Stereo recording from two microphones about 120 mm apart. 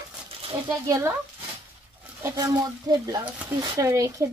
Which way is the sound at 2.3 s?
35° right (ahead or behind).